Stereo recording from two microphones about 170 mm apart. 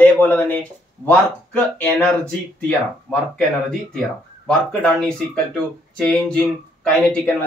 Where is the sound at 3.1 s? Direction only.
5° left (ahead or behind).